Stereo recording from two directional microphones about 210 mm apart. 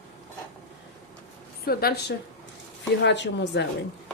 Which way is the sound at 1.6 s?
50° left (ahead or behind).